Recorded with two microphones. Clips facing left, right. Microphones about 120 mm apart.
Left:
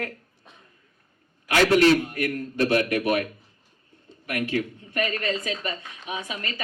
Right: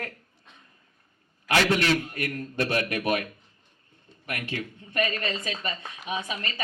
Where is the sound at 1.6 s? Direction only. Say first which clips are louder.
Left 7 dB; 40° left (ahead or behind).